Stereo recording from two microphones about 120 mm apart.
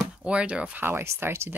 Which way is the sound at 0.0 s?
10° right (ahead or behind).